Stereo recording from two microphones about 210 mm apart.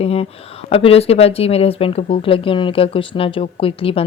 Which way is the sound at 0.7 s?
30° left (ahead or behind).